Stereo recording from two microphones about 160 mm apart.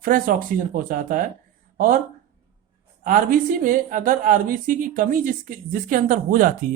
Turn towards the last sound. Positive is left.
turn(degrees=-60)  # may be behind; listen again after turning